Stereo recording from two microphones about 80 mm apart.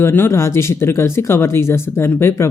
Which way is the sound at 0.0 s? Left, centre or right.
Left.